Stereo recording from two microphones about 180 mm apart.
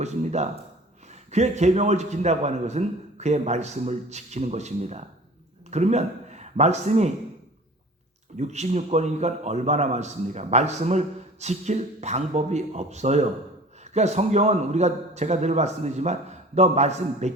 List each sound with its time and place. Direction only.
0.0 s a man's voice: 40° right (ahead or behind)
8.4 s a man's voice: 40° right (ahead or behind)